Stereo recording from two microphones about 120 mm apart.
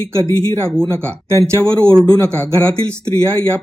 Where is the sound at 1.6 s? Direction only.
10° left (ahead or behind).